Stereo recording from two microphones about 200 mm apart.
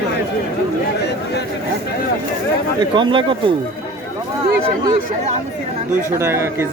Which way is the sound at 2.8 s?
25° right (ahead or behind).